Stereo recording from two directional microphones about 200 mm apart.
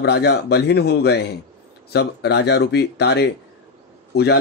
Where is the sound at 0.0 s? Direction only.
55° left (ahead or behind).